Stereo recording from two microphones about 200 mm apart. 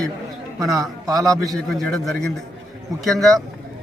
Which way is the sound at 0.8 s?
15° right (ahead or behind).